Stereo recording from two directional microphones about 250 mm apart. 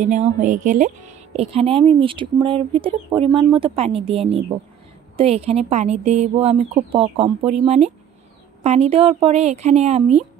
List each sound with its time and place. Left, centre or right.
0.0 s speech: right